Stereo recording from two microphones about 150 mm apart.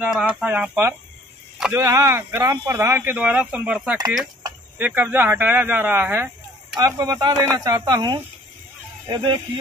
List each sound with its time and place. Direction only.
0.0 s speech: 5° right (ahead or behind); by 9.4 s 30° right (ahead or behind)